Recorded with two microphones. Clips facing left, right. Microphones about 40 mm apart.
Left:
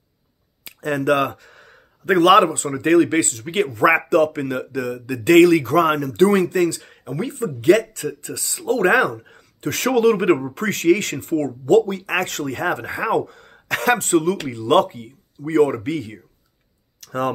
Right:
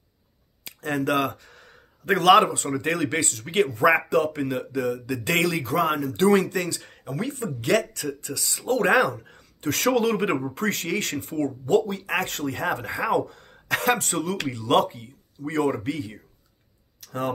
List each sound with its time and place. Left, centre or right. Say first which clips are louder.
0.7 s speech: left 6 dB; left
15.8 s speech: left 4 dB; left